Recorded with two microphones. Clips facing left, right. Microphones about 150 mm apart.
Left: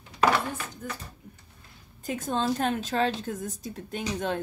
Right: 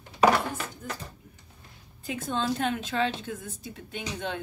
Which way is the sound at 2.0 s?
40° left (ahead or behind).